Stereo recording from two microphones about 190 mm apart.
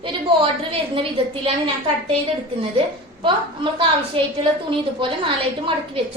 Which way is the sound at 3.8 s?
30° right (ahead or behind).